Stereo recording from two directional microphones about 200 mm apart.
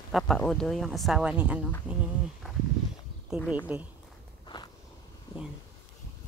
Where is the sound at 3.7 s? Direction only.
10° right (ahead or behind).